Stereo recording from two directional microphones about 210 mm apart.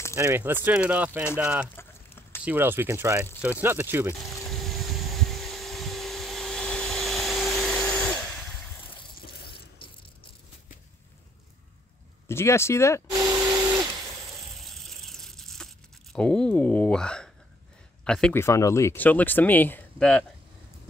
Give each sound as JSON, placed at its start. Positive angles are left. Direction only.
{"t": 0.1, "sound": "speech", "side_deg": -10}
{"t": 1.8, "sound": "a sound", "side_deg": 10}
{"t": 2.4, "sound": "speech", "side_deg": -10}
{"t": 4.5, "sound": "a sound", "side_deg": 0}
{"t": 9.2, "sound": "water", "side_deg": 50}
{"t": 12.3, "sound": "speech", "side_deg": 10}
{"t": 13.1, "sound": "a sound", "side_deg": -15}
{"t": 14.3, "sound": "tearing", "side_deg": 0}
{"t": 18.0, "sound": "speech", "side_deg": 5}